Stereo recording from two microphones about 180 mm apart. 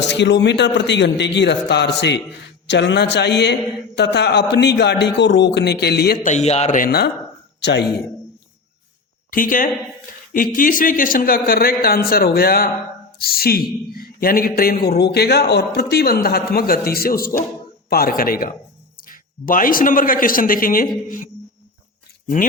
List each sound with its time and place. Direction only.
0.1 s a man's voice: 75° left (ahead or behind)
6.2 s a man's voice: 40° left (ahead or behind); by 7.1 s 55° left (ahead or behind)
7.6 s a man's voice: 70° left (ahead or behind)
9.3 s a man's voice: 50° left (ahead or behind)